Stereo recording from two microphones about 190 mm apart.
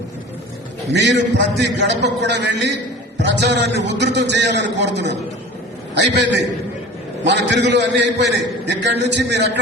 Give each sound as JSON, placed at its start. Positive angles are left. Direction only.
{"t": 0.9, "sound": "a man's voice", "side_deg": -65}